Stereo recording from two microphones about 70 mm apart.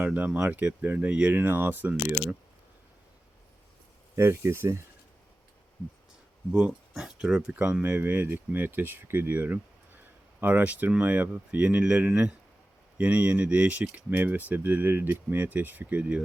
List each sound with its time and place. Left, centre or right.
0.0 s speech: right
1.9 s speech: centre
4.1 s speech: right
6.5 s speech: centre
7.5 s speech: right